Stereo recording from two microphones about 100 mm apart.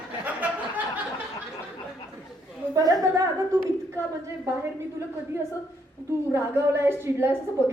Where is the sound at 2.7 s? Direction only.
35° right (ahead or behind).